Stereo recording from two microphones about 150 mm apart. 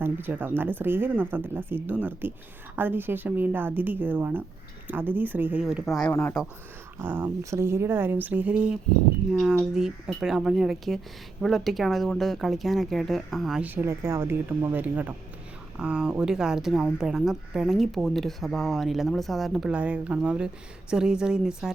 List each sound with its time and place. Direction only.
0.0 s speech: 15° right (ahead or behind)
6.1 s speech: 15° left (ahead or behind)
7.0 s speech: 10° right (ahead or behind)
13.7 s speech: 15° right (ahead or behind)